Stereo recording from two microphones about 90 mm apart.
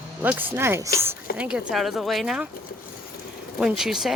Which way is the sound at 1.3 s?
10° right (ahead or behind).